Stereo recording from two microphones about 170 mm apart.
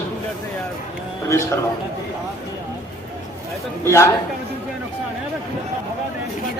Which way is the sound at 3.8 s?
15° left (ahead or behind).